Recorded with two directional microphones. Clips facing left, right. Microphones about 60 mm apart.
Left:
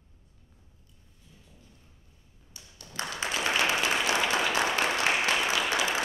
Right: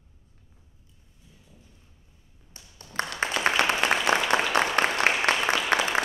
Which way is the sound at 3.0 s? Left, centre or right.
Right.